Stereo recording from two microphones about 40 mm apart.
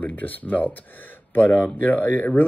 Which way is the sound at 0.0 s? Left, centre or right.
Left.